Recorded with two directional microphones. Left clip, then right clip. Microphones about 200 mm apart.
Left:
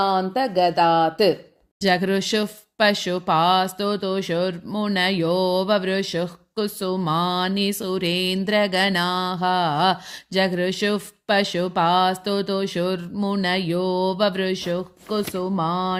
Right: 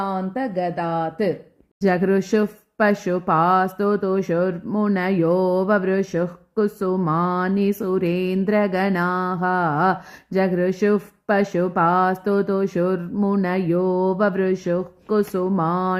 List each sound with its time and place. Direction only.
0.0 s speech: 15° left (ahead or behind)
1.8 s speech: 55° left (ahead or behind)